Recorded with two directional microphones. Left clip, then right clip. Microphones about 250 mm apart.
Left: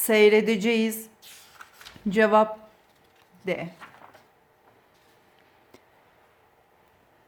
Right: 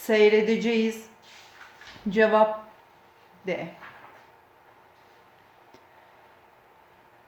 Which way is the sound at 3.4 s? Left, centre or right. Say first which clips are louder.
Left 1 dB; left.